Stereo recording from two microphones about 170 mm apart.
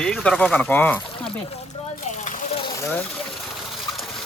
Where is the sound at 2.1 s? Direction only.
45° left (ahead or behind).